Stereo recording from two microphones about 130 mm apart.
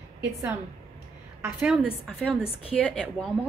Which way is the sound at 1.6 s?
5° right (ahead or behind).